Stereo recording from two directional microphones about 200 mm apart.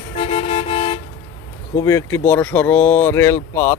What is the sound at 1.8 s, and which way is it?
Speech, 15° left (ahead or behind).